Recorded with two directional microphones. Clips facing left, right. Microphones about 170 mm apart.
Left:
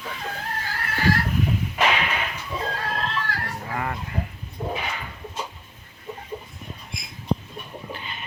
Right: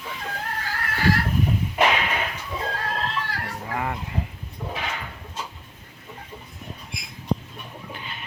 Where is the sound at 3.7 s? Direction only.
10° right (ahead or behind).